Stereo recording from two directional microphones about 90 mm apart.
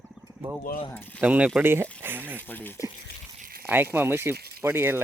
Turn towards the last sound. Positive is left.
turn(degrees=-25)  # may be behind; listen again after turning